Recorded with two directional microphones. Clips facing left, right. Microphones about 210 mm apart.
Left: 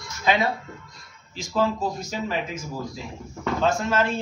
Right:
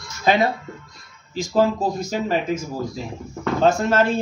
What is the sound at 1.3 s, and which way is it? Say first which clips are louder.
Speech: right 6 dB; 35° right (ahead or behind).